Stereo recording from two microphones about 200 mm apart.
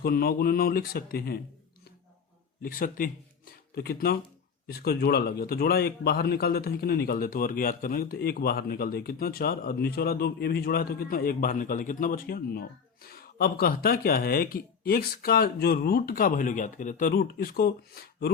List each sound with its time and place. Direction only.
0.0 s speech: 50° left (ahead or behind)
2.6 s speech: 45° left (ahead or behind)